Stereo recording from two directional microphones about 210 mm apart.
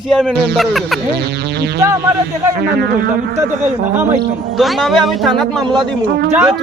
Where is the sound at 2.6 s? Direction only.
50° right (ahead or behind).